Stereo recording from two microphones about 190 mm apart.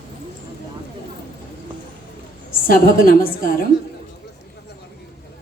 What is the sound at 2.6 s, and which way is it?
Speech, 50° left (ahead or behind).